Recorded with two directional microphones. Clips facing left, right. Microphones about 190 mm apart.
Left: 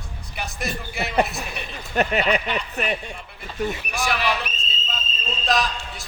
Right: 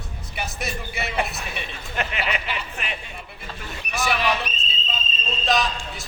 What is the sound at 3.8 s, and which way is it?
Speech, centre (ahead or behind).